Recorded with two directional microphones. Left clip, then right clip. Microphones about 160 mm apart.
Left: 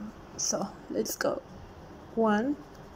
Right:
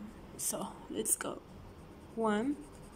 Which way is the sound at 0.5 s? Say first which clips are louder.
Left 6 dB; 15° right (ahead or behind).